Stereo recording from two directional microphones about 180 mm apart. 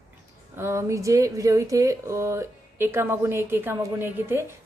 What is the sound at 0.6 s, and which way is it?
A woman's voice, 15° right (ahead or behind).